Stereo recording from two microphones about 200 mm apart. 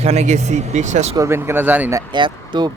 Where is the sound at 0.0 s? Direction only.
35° right (ahead or behind).